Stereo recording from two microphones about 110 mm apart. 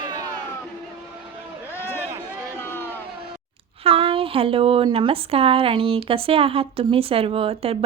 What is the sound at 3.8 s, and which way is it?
Speech, 60° right (ahead or behind).